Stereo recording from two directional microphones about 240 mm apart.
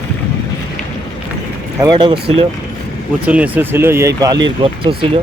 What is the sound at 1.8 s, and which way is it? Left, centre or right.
Speech, centre.